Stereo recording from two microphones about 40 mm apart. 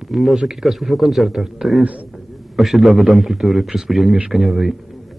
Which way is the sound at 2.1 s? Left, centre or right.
Centre.